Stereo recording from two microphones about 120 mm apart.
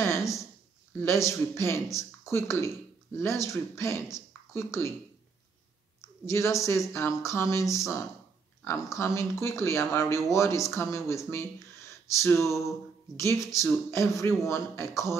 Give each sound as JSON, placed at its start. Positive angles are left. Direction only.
{"t": 0.0, "sound": "a sound", "side_deg": 25}
{"t": 1.0, "sound": "speech", "side_deg": 25}
{"t": 5.9, "sound": "speech", "side_deg": 25}